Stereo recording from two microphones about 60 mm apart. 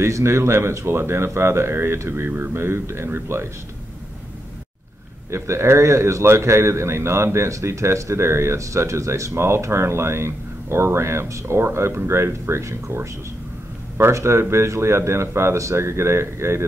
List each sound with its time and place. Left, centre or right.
0.0 s speech: right
5.3 s speech: right